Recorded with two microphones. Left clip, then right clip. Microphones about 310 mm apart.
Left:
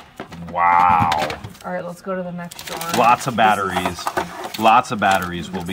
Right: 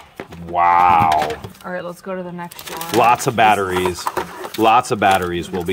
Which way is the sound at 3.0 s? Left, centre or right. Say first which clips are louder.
Right 2 dB; right.